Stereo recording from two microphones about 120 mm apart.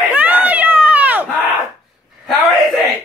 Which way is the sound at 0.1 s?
15° right (ahead or behind).